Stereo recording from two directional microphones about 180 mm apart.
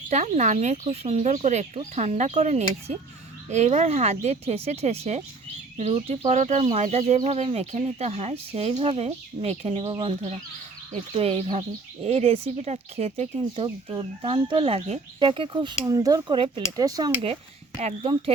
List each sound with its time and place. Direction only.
0.1 s speech: 40° right (ahead or behind); by 17.1 s 20° right (ahead or behind)
17.7 s speech: 30° right (ahead or behind)